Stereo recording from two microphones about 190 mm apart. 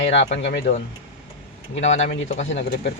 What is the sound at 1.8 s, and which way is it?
Speech, 35° left (ahead or behind).